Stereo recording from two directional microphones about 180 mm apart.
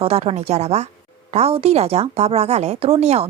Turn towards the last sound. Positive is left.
turn(degrees=-35)  # may be behind; listen again after turning